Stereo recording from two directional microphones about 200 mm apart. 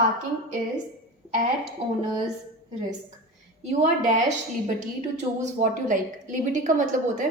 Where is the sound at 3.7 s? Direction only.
35° right (ahead or behind).